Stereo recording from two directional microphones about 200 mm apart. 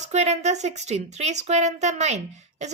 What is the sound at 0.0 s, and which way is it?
A woman's voice, 35° right (ahead or behind).